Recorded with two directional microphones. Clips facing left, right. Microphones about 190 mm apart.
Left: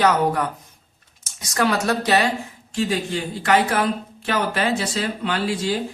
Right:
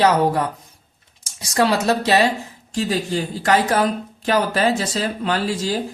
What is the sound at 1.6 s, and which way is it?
Speech, 30° right (ahead or behind).